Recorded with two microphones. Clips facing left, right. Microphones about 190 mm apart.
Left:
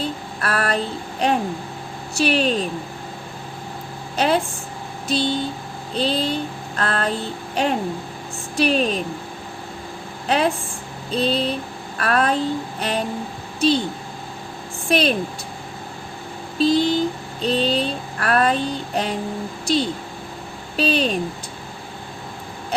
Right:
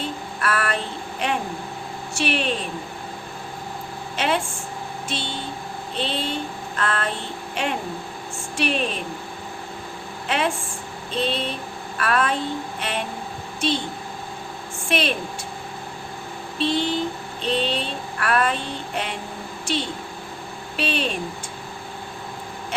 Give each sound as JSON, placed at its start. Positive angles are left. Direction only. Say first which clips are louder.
{"t": 0.0, "sound": "a sound", "louder": "left 1 dB", "side_deg": 35}
{"t": 1.2, "sound": "mantra", "louder": "left 5 dB", "side_deg": 35}
{"t": 4.2, "sound": "mantra", "louder": "left 4 dB", "side_deg": 40}
{"t": 5.9, "sound": "female singing", "louder": "left 5 dB", "side_deg": 35}
{"t": 7.5, "sound": "speech", "louder": "left 5 dB", "side_deg": 35}
{"t": 8.5, "sound": "mantra", "louder": "left 5 dB", "side_deg": 35}
{"t": 10.2, "sound": "speech", "louder": "left 4 dB", "side_deg": 40}
{"t": 11.1, "sound": "mantra", "louder": "left 5 dB", "side_deg": 35}
{"t": 14.8, "sound": "speech", "louder": "left 5 dB", "side_deg": 40}
{"t": 16.6, "sound": "vehicle", "louder": "left 6 dB", "side_deg": 40}
{"t": 17.4, "sound": "mantra", "louder": "left 4 dB", "side_deg": 40}